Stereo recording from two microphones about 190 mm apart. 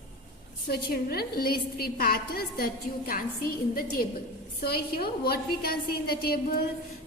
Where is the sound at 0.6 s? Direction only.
55° left (ahead or behind).